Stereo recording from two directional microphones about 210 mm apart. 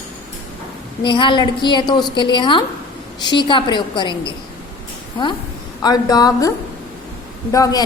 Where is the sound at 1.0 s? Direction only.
25° left (ahead or behind).